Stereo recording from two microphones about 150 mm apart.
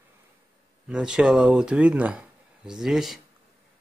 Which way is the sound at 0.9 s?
5° right (ahead or behind).